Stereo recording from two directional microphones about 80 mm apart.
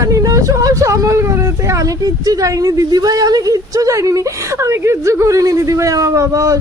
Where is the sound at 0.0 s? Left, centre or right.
Right.